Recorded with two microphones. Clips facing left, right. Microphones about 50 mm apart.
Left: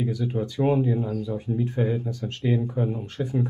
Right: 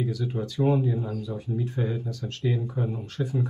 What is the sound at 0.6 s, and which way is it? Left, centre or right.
Speech, left.